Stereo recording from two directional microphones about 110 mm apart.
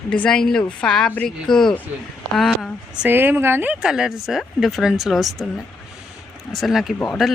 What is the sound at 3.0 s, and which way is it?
Speech, 20° right (ahead or behind).